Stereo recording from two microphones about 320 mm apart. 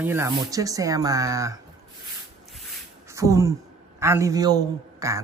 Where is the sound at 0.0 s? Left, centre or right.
Centre.